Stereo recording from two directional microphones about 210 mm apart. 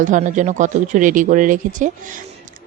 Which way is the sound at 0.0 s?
35° right (ahead or behind).